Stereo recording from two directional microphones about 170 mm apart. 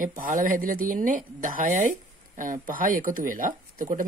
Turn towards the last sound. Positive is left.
turn(degrees=-50)  # may be behind; listen again after turning